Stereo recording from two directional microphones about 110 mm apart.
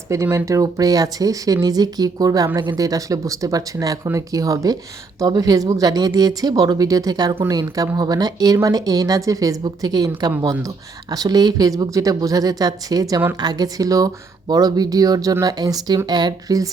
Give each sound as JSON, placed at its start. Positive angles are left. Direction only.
{"t": 0.1, "sound": "speech", "side_deg": -25}